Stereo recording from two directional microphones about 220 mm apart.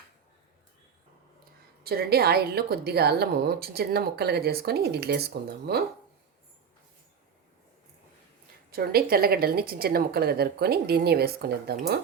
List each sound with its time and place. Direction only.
1.8 s a woman's voice: 45° right (ahead or behind)
8.7 s a woman's voice: 45° right (ahead or behind)